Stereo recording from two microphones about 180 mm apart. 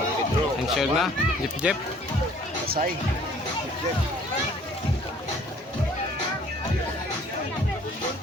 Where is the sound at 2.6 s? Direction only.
55° right (ahead or behind).